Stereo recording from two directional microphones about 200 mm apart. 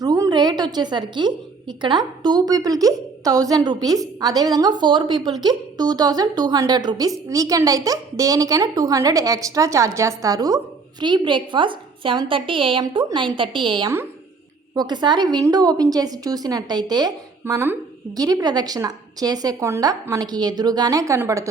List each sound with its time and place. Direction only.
0.0 s a woman's voice: 20° right (ahead or behind)